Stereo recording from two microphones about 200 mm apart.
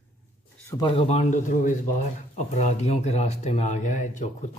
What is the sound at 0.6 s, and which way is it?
Speech, 15° left (ahead or behind).